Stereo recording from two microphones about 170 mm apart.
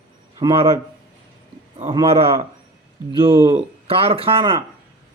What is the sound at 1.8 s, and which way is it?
A man's voice, 35° right (ahead or behind).